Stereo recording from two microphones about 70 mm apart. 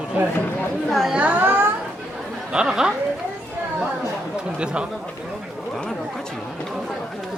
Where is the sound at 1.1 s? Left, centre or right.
Right.